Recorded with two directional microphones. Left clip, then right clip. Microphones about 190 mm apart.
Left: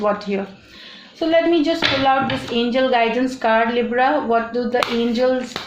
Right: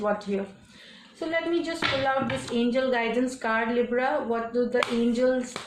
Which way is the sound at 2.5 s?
30° left (ahead or behind).